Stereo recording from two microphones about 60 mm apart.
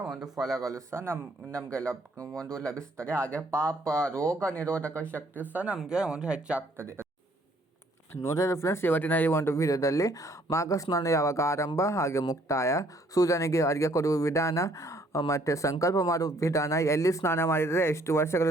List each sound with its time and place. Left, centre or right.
0.1 s speech: centre
0.6 s a man's voice: right
1.5 s speech: centre
4.3 s speech: right
4.5 s speech: left
5.5 s speech: centre
6.7 s a man's voice: right
8.2 s speech: left
9.6 s speech: left
12.5 s speech: left
17.3 s speech: left